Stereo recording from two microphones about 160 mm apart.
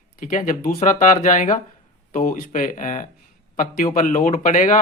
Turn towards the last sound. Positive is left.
turn(degrees=55)  # may be behind; listen again after turning